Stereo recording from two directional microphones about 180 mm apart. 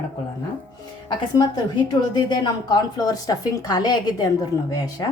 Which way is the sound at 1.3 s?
20° left (ahead or behind).